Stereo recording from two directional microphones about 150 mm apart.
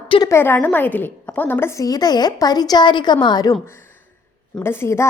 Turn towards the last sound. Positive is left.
turn(degrees=15)  # may be behind; listen again after turning